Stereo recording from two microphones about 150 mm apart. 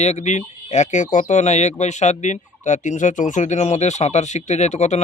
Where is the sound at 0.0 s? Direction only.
50° left (ahead or behind).